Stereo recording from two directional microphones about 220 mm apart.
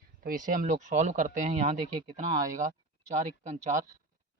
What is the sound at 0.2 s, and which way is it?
Speech, 40° right (ahead or behind).